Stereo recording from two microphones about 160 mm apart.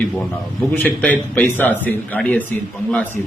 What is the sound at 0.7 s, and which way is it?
Speech, 10° left (ahead or behind).